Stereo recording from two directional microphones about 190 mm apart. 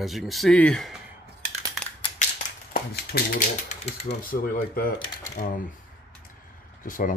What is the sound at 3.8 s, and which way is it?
Speech, 35° left (ahead or behind).